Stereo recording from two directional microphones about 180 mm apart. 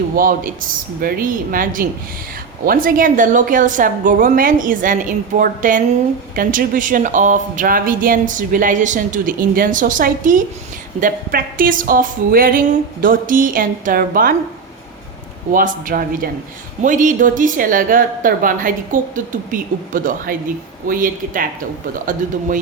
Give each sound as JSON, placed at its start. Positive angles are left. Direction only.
{"t": 0.2, "sound": "speech", "side_deg": -50}
{"t": 15.5, "sound": "speech", "side_deg": -50}